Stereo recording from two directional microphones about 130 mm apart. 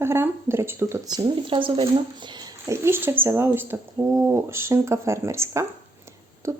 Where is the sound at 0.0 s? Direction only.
20° right (ahead or behind); by 1.9 s 40° right (ahead or behind).